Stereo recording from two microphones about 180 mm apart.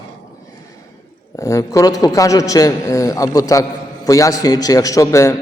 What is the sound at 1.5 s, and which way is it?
A man's voice, 15° left (ahead or behind).